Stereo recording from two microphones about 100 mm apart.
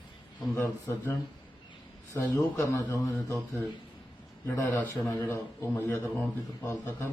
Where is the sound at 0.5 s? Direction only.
25° left (ahead or behind).